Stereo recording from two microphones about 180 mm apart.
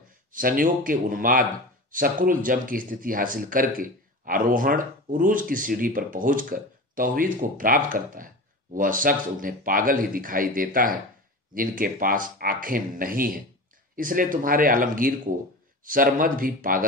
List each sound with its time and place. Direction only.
0.3 s speech: 50° right (ahead or behind)